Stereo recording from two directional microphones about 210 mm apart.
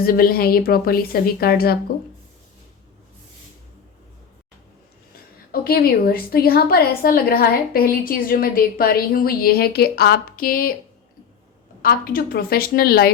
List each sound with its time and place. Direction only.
0.0 s a woman's voice: 45° left (ahead or behind)
5.5 s a woman's voice: 45° left (ahead or behind)
11.8 s a woman's voice: 45° left (ahead or behind)